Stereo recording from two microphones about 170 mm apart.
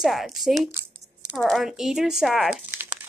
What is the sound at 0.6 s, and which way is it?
Speech, 15° right (ahead or behind).